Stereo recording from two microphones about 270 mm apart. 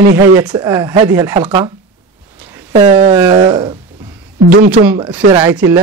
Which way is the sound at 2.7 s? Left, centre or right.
Right.